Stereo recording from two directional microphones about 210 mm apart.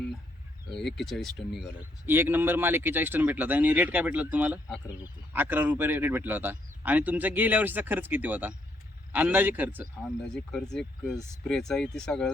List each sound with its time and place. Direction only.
0.7 s speech: 55° left (ahead or behind)
0.9 s speech: centre (ahead or behind)
2.0 s speech: 10° right (ahead or behind)
10.3 s speech: 5° left (ahead or behind)